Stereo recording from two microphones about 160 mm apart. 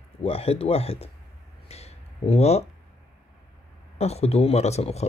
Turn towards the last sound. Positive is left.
turn(degrees=40)  # may be behind; listen again after turning